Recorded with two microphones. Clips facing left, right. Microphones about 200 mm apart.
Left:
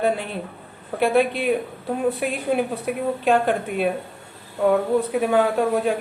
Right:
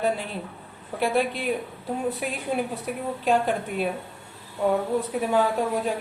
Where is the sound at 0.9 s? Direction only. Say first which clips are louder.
Left 5 dB; 60° left (ahead or behind).